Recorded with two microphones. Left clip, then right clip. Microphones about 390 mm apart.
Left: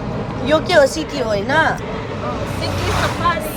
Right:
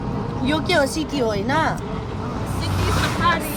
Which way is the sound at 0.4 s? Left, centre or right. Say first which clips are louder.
Left 7 dB; centre.